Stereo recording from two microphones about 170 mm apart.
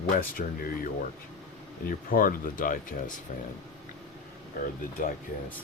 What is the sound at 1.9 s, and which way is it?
Speech, 55° left (ahead or behind).